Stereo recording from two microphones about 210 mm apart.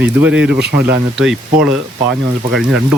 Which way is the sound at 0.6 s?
50° right (ahead or behind).